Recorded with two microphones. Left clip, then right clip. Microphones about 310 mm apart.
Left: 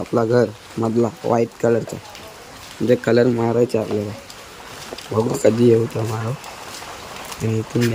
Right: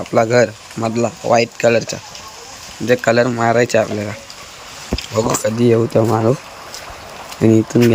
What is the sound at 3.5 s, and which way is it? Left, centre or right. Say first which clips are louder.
Speech: right 5 dB; right.